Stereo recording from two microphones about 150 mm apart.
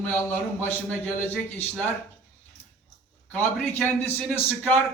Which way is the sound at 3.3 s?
10° left (ahead or behind).